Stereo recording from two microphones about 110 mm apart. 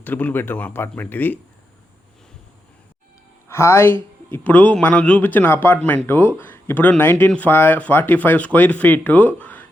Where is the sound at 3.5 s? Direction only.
25° left (ahead or behind).